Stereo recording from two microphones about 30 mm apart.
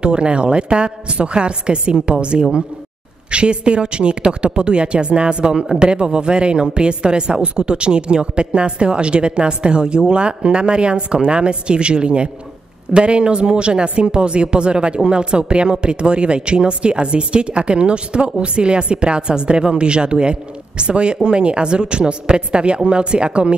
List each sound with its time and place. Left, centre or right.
0.0 s speech: right